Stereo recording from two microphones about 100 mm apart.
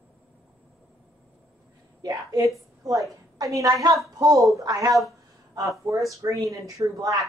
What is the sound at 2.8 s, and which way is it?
A woman's voice, 40° right (ahead or behind).